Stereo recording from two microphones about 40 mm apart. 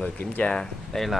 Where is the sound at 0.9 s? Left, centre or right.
Centre.